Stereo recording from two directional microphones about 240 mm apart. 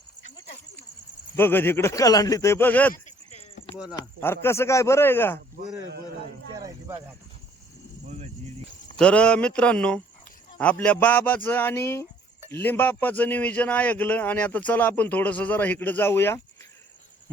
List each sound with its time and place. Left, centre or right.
1.4 s a man's voice: centre
2.9 s a sound: left
3.9 s a man's voice: centre
6.5 s snake: centre
9.0 s a man's voice: centre